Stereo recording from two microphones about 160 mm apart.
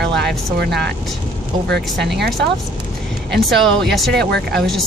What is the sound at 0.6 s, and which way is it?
Speech, 90° right.